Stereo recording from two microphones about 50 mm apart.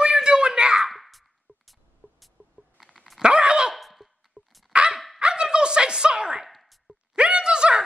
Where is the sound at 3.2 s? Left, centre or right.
Right.